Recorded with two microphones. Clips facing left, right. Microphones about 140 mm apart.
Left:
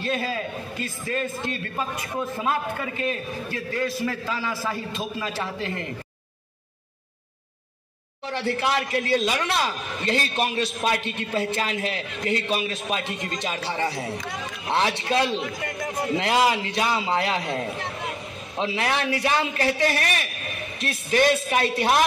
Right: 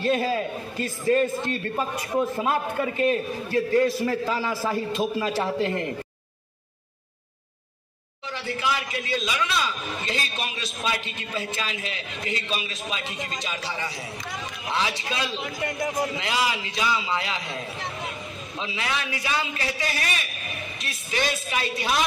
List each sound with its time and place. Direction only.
0.0 s a man's voice: 35° right (ahead or behind)
2.5 s a man's voice: 35° right (ahead or behind)
8.3 s speech: 65° left (ahead or behind)
15.6 s a man's voice: 20° right (ahead or behind)
16.1 s speech: 55° left (ahead or behind)